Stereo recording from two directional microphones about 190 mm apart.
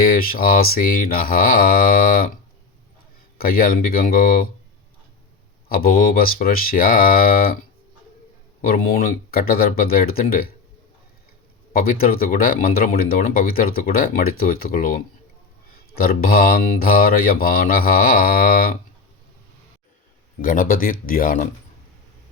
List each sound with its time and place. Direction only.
0.0 s speech: 50° left (ahead or behind)
5.6 s speech: 50° left (ahead or behind)
8.6 s speech: 50° left (ahead or behind)
11.7 s speech: 50° left (ahead or behind)
20.4 s speech: 45° left (ahead or behind)